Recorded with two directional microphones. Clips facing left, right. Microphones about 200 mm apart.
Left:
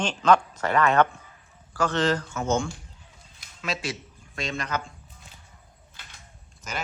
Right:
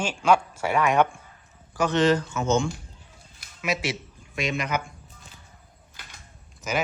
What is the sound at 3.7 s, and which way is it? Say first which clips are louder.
A man's voice: right 4 dB; 20° right (ahead or behind).